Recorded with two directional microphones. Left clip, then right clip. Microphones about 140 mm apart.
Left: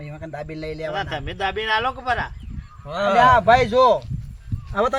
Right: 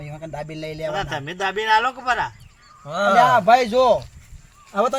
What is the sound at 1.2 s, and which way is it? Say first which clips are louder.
Speech: right 1 dB; 65° left (ahead or behind).